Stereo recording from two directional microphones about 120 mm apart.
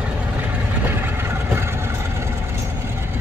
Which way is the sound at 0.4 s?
15° right (ahead or behind).